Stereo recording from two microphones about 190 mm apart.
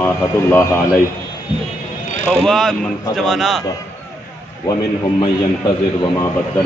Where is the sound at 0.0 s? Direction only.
15° left (ahead or behind).